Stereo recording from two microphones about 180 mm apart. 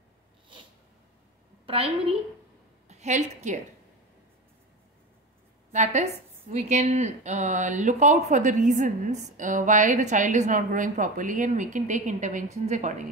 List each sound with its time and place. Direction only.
1.7 s a woman's voice: 30° right (ahead or behind)
5.7 s a woman's voice: 40° right (ahead or behind)